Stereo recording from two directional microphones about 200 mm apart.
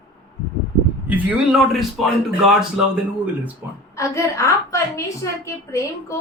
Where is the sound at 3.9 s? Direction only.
15° left (ahead or behind).